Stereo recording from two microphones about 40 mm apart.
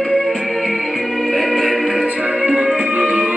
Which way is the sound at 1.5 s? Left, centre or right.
Centre.